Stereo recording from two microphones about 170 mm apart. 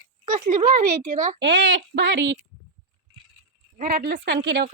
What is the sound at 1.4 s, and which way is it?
Speech, 75° right (ahead or behind).